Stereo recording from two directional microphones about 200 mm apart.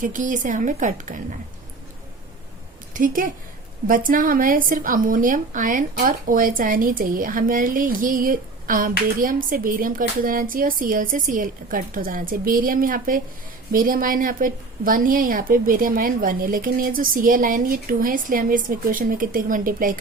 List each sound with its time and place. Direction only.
0.0 s a woman's voice: 40° right (ahead or behind)
2.9 s a woman's voice: 45° right (ahead or behind)